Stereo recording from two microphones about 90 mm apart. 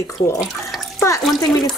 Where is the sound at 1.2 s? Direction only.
Centre (ahead or behind).